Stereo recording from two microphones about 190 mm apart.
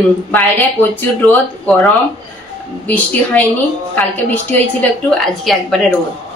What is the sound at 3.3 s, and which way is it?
A woman's voice, 10° left (ahead or behind).